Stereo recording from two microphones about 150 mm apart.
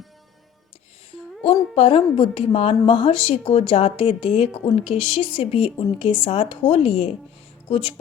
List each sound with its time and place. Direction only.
1.7 s speech: 40° left (ahead or behind)